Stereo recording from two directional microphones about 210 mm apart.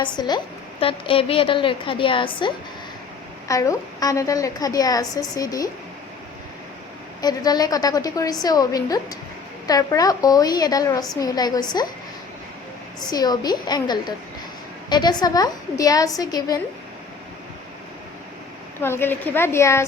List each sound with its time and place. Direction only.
0.0 s a woman's voice: 20° left (ahead or behind)
3.5 s a woman's voice: 15° left (ahead or behind)
7.2 s a woman's voice: 20° left (ahead or behind)
13.0 s a woman's voice: 20° left (ahead or behind)
18.8 s a woman's voice: 10° left (ahead or behind)